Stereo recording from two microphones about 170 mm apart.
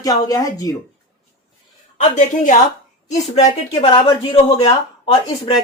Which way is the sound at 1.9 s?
45° left (ahead or behind).